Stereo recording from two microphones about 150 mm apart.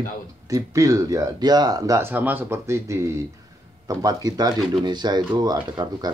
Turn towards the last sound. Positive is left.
turn(degrees=-30)  # may be behind; listen again after turning